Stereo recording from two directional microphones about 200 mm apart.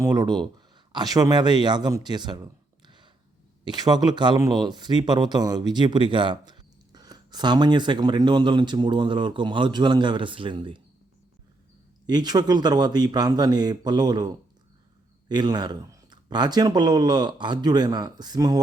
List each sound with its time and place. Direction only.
0.0 s speech: 20° right (ahead or behind)
12.0 s speech: 20° right (ahead or behind)